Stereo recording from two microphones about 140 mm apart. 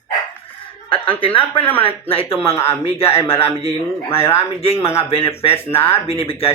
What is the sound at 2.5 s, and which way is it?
Speech, 20° left (ahead or behind).